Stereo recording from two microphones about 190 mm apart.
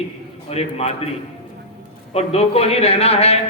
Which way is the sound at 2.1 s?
30° left (ahead or behind).